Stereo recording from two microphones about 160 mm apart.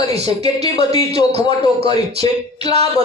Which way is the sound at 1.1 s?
40° right (ahead or behind).